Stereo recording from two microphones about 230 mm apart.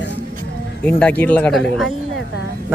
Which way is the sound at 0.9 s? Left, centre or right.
Centre.